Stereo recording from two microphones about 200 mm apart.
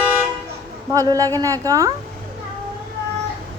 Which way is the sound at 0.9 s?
15° right (ahead or behind).